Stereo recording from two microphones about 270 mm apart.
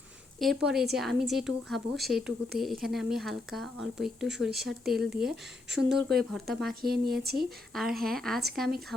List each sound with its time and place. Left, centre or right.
0.3 s speech: centre
6.8 s speech: right
7.7 s speech: centre